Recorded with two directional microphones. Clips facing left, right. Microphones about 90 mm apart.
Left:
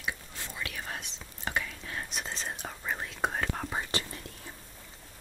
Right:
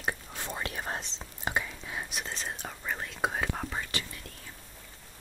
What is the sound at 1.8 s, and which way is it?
Whispering, 5° right (ahead or behind).